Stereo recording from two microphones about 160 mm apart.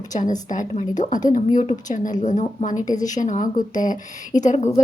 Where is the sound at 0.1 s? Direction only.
50° left (ahead or behind).